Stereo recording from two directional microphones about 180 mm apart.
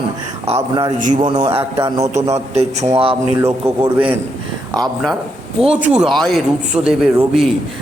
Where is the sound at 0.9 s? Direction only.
45° right (ahead or behind).